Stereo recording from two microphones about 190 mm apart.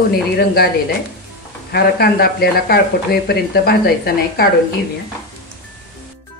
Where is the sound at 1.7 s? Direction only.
55° left (ahead or behind).